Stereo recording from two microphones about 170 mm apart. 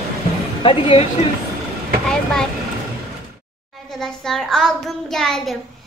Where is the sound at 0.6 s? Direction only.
30° left (ahead or behind).